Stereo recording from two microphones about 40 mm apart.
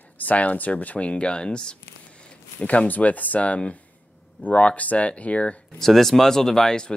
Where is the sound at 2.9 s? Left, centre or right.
Left.